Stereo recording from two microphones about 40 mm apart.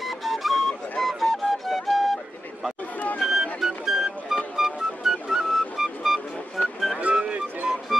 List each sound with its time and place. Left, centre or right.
0.0 s a sound: centre
1.0 s flute: centre
3.2 s music: centre
7.2 s music: right